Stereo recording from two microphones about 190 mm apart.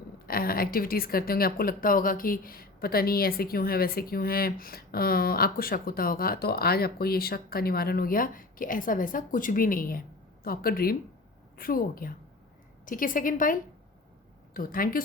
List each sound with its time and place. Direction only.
0.3 s speech: 50° left (ahead or behind)